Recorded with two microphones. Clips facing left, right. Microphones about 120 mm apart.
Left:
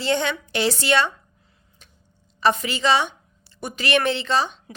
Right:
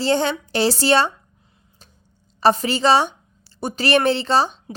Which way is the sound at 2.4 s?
35° right (ahead or behind).